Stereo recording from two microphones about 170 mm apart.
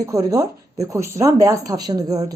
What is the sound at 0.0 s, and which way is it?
Speech, 20° right (ahead or behind).